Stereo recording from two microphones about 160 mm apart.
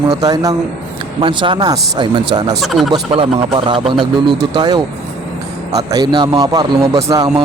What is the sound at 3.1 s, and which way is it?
Speech, 35° right (ahead or behind).